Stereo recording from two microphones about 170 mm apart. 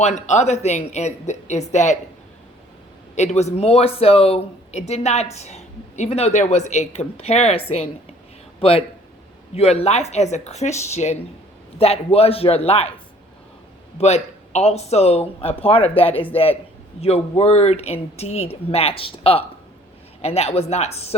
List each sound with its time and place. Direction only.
0.0 s speech: 40° left (ahead or behind)
3.2 s speech: 40° left (ahead or behind)
14.0 s speech: 40° left (ahead or behind)